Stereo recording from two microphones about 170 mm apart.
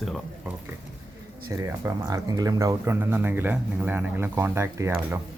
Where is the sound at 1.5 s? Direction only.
20° right (ahead or behind).